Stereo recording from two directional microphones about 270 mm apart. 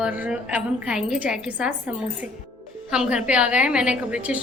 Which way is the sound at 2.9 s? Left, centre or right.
Centre.